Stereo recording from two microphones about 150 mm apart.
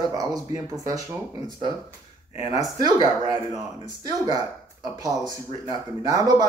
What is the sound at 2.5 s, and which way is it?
Speech, 40° left (ahead or behind).